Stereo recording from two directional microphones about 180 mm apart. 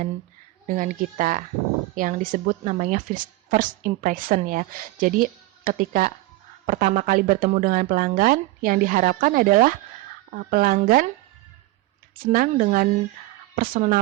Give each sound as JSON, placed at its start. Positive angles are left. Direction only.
{"t": 0.7, "sound": "a woman's voice", "side_deg": -45}
{"t": 12.2, "sound": "a woman's voice", "side_deg": -50}